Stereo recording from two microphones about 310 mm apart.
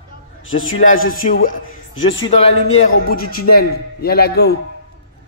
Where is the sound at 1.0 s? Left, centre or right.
Left.